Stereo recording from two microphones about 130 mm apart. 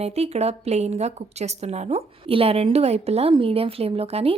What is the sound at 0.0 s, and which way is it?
Speech, 55° right (ahead or behind).